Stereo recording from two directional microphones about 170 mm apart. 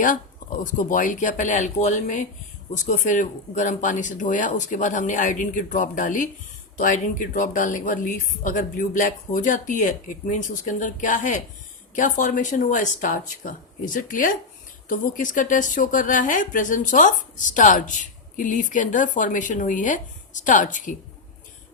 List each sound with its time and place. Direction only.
0.6 s speech: 50° left (ahead or behind)